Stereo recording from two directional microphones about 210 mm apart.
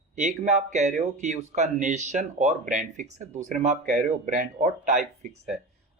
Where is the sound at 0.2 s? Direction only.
35° right (ahead or behind).